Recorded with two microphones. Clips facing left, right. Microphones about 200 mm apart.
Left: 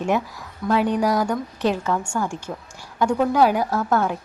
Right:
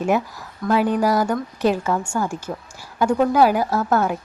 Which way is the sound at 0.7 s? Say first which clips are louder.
Right 1 dB; 5° right (ahead or behind).